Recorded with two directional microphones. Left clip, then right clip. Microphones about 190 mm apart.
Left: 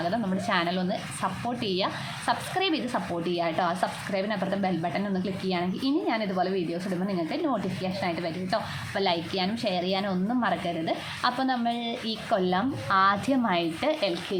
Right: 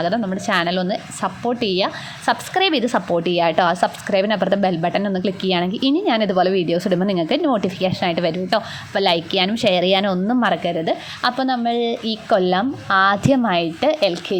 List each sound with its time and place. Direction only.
0.4 s a woman's voice: 35° right (ahead or behind)